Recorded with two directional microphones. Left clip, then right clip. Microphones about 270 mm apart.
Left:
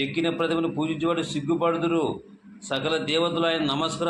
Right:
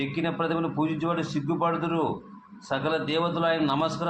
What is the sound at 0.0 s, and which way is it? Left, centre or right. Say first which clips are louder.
A man's voice: left 3 dB; left.